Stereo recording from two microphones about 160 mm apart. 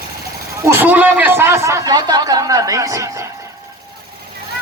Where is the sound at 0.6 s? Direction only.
15° right (ahead or behind).